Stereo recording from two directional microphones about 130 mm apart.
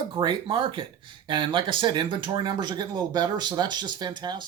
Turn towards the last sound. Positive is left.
turn(degrees=-35)  # may be behind; listen again after turning